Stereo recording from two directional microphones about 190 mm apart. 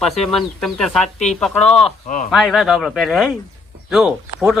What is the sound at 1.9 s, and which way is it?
Speech, 40° left (ahead or behind).